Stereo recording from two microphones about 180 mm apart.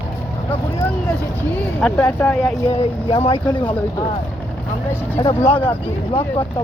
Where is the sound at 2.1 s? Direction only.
5° left (ahead or behind).